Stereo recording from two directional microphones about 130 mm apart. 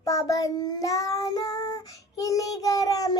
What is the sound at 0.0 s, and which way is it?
Child singing, 25° left (ahead or behind).